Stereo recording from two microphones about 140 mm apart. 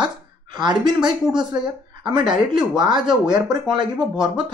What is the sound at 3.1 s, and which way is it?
Speech, 5° right (ahead or behind).